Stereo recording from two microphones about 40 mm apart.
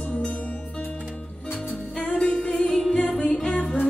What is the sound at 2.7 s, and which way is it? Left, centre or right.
Music, centre.